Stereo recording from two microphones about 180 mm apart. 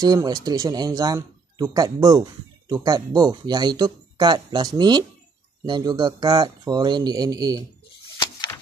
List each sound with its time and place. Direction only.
0.0 s speech: 20° right (ahead or behind)
8.2 s door: 25° left (ahead or behind)